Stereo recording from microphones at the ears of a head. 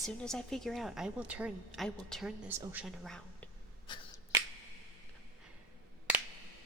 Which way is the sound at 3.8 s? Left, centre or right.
Left.